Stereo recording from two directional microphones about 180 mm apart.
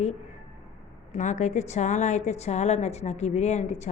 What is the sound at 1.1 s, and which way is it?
A woman's voice, 40° left (ahead or behind).